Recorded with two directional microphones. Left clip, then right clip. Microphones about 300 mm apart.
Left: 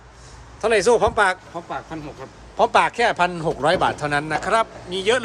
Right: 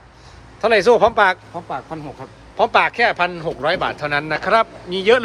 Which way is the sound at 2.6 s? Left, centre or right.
Centre.